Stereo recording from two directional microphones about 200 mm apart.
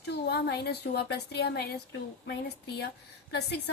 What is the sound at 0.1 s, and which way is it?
Speech, 55° left (ahead or behind).